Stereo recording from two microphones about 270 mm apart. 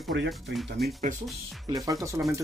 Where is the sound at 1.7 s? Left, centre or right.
Centre.